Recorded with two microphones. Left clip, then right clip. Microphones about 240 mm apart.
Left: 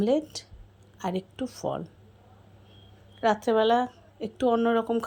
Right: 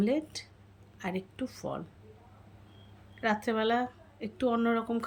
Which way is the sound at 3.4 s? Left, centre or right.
Centre.